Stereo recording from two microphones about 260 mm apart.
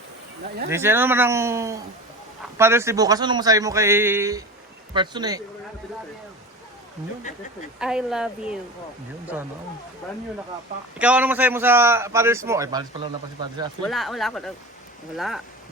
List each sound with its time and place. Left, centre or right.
0.7 s a man's voice: centre
7.8 s a woman's voice: centre
10.9 s a man's voice: centre
13.8 s a woman's voice: centre